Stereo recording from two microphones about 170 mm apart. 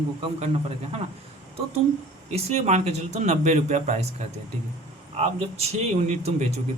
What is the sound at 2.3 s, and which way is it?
A man's voice, 40° right (ahead or behind).